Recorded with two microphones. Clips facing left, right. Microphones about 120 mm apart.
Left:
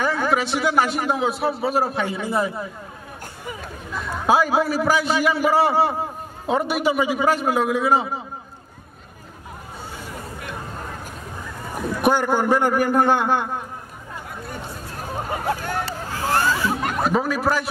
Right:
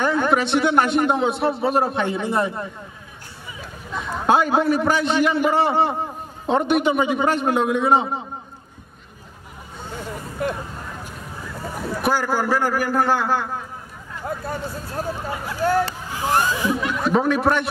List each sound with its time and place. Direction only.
0.0 s a man's voice: centre (ahead or behind)
3.9 s a man's voice: 5° left (ahead or behind)
10.4 s hubbub: 35° right (ahead or behind)
12.0 s a man's voice: 20° left (ahead or behind)
15.1 s hubbub: 45° left (ahead or behind)
16.1 s a sound: 15° right (ahead or behind)
16.8 s speech: 45° left (ahead or behind)
17.1 s a man's voice: centre (ahead or behind)